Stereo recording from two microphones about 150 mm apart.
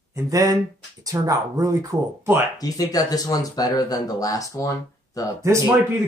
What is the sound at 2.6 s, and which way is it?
Speech, 25° left (ahead or behind).